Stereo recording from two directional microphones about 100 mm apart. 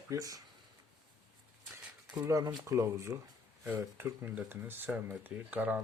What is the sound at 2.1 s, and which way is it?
Speech, 30° right (ahead or behind).